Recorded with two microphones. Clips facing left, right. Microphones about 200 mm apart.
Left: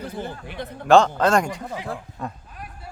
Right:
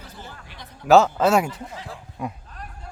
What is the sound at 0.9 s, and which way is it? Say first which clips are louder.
Speech: even; 5° right (ahead or behind).